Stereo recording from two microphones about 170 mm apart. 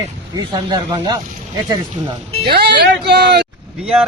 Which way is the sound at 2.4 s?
75° right (ahead or behind).